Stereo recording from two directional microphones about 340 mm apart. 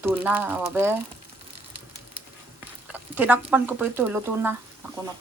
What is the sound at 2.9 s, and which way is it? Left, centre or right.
Speech, centre.